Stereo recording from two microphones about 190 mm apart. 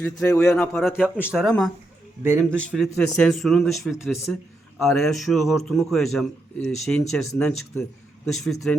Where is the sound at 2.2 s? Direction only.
15° right (ahead or behind).